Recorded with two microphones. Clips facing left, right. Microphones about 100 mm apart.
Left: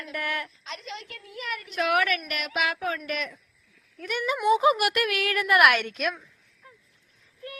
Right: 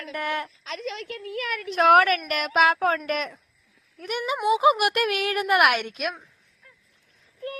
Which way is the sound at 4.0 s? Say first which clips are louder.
Even; 20° right (ahead or behind).